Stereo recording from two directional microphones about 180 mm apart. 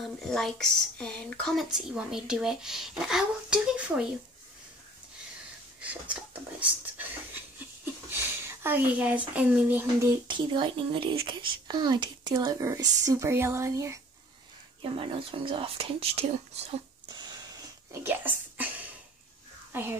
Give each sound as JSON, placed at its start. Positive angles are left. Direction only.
{"t": 0.2, "sound": "a woman's voice", "side_deg": 0}
{"t": 5.8, "sound": "a sound", "side_deg": -5}
{"t": 7.5, "sound": "a sound", "side_deg": -10}
{"t": 9.3, "sound": "speech", "side_deg": -5}
{"t": 10.2, "sound": "a child's voice", "side_deg": -25}
{"t": 14.8, "sound": "speech", "side_deg": -30}
{"t": 17.1, "sound": "a sound", "side_deg": -25}
{"t": 17.9, "sound": "speech", "side_deg": -10}
{"t": 19.7, "sound": "speech", "side_deg": -10}